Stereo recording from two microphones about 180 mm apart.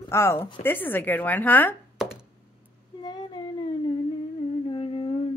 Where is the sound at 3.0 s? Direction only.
25° left (ahead or behind).